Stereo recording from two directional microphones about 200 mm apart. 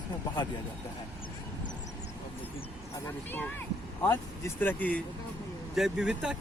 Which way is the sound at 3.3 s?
10° left (ahead or behind).